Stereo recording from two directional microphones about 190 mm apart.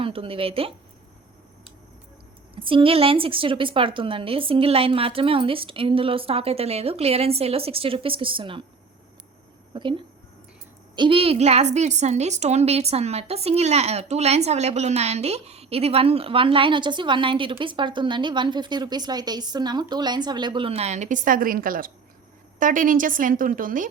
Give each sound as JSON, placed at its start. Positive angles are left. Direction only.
{"t": 0.0, "sound": "a woman's voice", "side_deg": -30}
{"t": 2.6, "sound": "a woman's voice", "side_deg": -25}
{"t": 9.7, "sound": "a woman's voice", "side_deg": -25}